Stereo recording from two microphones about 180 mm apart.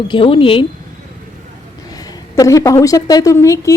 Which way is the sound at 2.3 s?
20° left (ahead or behind).